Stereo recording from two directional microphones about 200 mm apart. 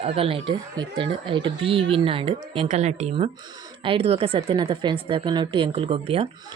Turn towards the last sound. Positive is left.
turn(degrees=-30)  # may be behind; listen again after turning